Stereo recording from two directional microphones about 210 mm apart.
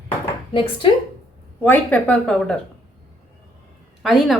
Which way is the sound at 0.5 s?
25° left (ahead or behind).